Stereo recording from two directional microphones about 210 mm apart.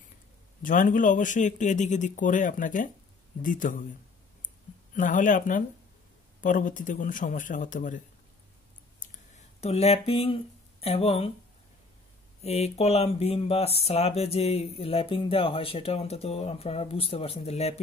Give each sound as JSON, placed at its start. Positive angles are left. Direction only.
{"t": 0.6, "sound": "speech", "side_deg": 40}
{"t": 4.9, "sound": "speech", "side_deg": 40}
{"t": 9.0, "sound": "a sound", "side_deg": 40}
{"t": 9.6, "sound": "speech", "side_deg": 30}
{"t": 12.4, "sound": "speech", "side_deg": 30}